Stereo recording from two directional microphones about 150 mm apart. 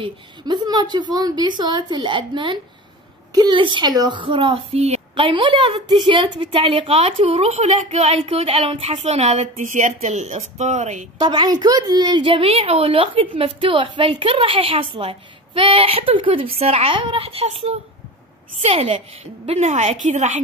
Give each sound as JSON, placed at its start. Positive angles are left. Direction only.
{"t": 0.0, "sound": "a woman's voice", "side_deg": -30}
{"t": 11.1, "sound": "a woman's voice", "side_deg": -30}